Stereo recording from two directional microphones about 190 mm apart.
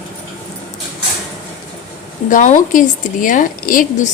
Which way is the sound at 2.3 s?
45° left (ahead or behind).